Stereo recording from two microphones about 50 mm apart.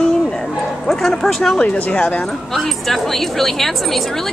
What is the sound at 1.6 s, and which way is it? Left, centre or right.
Speech, centre.